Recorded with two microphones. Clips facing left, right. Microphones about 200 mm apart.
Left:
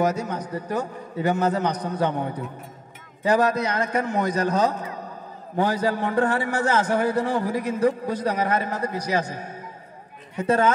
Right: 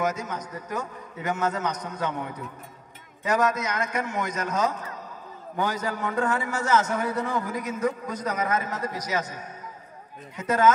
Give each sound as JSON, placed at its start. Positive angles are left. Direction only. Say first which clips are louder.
{"t": 0.0, "sound": "a man's voice", "louder": "left 5 dB", "side_deg": 35}